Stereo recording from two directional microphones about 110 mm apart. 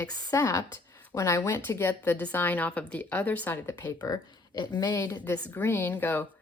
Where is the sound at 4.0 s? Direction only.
40° left (ahead or behind).